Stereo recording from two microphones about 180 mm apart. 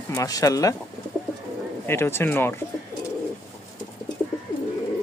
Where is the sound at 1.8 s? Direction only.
15° left (ahead or behind).